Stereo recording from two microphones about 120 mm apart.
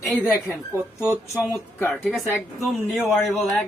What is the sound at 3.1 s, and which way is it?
Speech, centre (ahead or behind).